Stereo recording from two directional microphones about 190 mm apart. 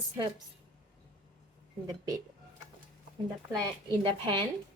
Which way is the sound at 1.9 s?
20° right (ahead or behind).